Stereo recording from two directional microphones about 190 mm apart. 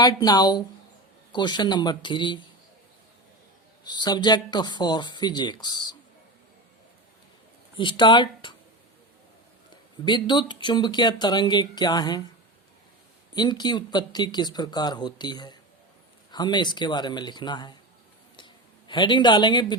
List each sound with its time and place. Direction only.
0.0 s speech: 20° left (ahead or behind)
3.8 s speech: 20° left (ahead or behind)
7.8 s speech: 25° left (ahead or behind)
10.2 s speech: 25° left (ahead or behind)
13.3 s speech: 20° left (ahead or behind)
18.3 s a sound: 25° left (ahead or behind)